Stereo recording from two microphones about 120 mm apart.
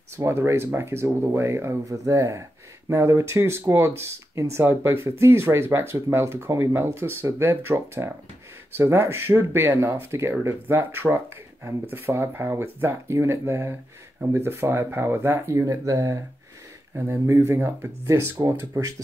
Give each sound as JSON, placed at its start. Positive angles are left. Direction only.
{"t": 0.2, "sound": "speech", "side_deg": -20}